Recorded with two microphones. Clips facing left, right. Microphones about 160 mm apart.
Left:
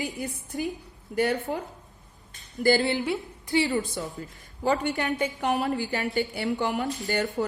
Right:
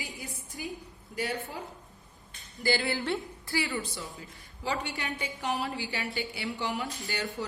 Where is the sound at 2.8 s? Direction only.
20° left (ahead or behind).